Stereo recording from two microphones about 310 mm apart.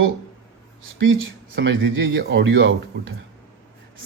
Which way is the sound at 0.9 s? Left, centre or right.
Right.